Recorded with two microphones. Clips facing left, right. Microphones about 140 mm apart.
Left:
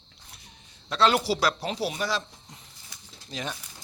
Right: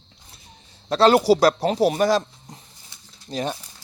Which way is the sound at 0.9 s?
40° right (ahead or behind).